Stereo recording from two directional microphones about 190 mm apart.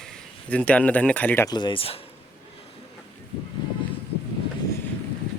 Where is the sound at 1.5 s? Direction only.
25° left (ahead or behind).